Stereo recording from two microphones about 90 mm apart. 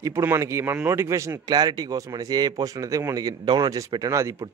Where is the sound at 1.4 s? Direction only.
50° right (ahead or behind).